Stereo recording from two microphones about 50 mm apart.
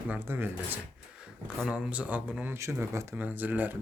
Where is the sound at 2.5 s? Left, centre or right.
Right.